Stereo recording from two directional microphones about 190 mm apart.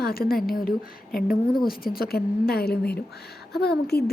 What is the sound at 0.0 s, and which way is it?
A woman's voice, 50° left (ahead or behind).